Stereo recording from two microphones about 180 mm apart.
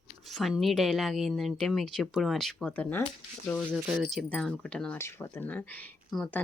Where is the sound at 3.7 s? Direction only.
5° right (ahead or behind).